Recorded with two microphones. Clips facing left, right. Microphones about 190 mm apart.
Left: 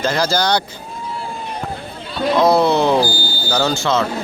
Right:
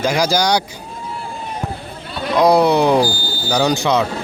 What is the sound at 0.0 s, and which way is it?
Speech, 10° right (ahead or behind).